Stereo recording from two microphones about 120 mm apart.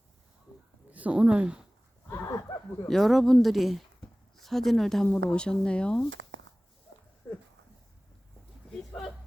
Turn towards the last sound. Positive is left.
turn(degrees=20)  # may be behind; listen again after turning